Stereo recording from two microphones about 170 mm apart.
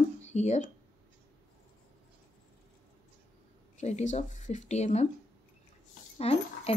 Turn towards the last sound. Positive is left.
turn(degrees=35)  # may be behind; listen again after turning